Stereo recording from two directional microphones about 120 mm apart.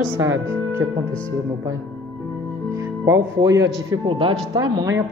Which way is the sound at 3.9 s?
45° right (ahead or behind).